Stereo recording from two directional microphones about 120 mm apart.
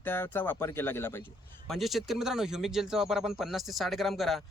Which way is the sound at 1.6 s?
Centre (ahead or behind).